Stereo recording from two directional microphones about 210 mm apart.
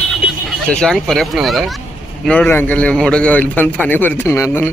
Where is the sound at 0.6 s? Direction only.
5° left (ahead or behind).